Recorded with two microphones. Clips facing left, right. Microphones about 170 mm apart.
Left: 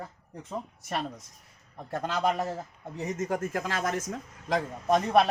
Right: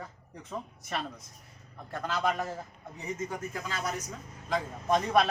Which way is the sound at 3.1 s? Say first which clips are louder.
Left 6 dB; 50° left (ahead or behind).